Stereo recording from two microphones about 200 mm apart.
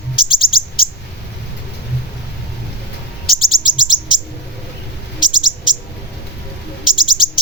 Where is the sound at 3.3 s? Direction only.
Centre (ahead or behind).